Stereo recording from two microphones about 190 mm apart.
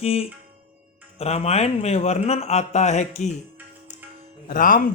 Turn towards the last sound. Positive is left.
turn(degrees=45)  # may be behind; listen again after turning